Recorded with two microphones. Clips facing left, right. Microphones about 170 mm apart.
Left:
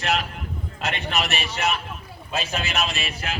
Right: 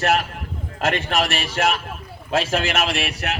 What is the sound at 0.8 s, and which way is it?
Speech, 50° right (ahead or behind).